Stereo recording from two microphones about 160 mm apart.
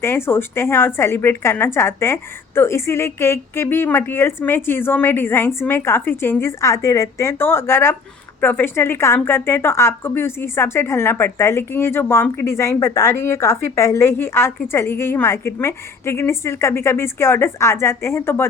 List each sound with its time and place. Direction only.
0.0 s a woman's voice: 15° left (ahead or behind)